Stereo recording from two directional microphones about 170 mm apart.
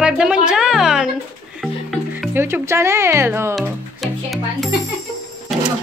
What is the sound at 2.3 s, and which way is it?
Speech, 15° right (ahead or behind).